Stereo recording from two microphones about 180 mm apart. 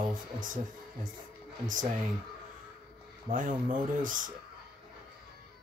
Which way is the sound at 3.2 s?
45° right (ahead or behind).